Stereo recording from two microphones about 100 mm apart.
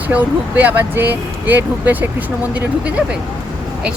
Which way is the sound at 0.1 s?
15° right (ahead or behind).